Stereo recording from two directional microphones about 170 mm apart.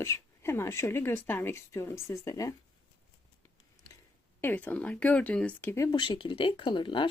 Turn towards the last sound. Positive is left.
turn(degrees=30)  # may be behind; listen again after turning